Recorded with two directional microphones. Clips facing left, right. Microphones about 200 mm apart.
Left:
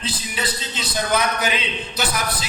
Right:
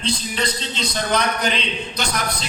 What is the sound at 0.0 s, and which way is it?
A man's voice, 5° left (ahead or behind).